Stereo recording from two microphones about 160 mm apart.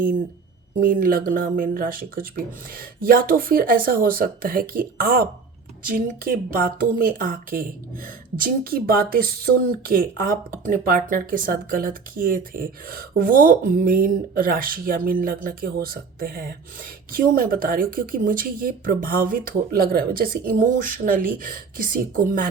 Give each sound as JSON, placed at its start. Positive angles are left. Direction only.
{"t": 0.8, "sound": "speech", "side_deg": -60}